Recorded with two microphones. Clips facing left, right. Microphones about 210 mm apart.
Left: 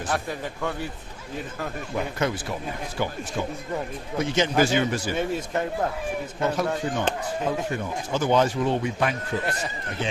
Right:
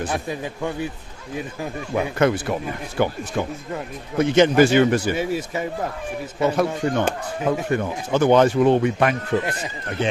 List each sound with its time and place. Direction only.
0.1 s a man's voice: 15° right (ahead or behind)
2.0 s speech: 60° right (ahead or behind)
4.2 s speech: 60° right (ahead or behind)
5.1 s a man's voice: 5° right (ahead or behind)
6.4 s speech: 60° right (ahead or behind)